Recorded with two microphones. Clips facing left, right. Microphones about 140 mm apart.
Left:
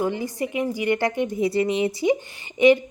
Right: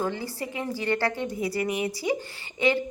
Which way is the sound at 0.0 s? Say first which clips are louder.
Left 5 dB; 20° left (ahead or behind).